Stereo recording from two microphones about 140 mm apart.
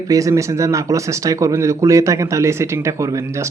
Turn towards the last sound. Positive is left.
turn(degrees=-20)  # may be behind; listen again after turning